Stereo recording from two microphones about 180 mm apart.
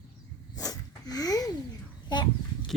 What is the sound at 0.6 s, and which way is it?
Sneeze, 20° left (ahead or behind).